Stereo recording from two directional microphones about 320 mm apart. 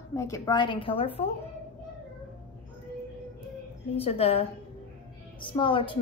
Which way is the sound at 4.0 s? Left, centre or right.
Centre.